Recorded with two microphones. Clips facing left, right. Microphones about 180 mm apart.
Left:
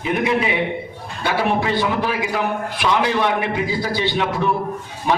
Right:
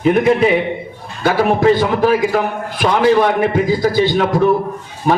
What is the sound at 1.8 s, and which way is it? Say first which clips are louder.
A man's voice: right 7 dB; 45° right (ahead or behind).